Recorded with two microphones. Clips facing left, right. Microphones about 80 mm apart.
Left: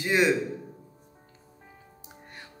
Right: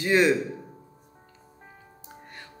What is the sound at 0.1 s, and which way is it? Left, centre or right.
Speech, centre.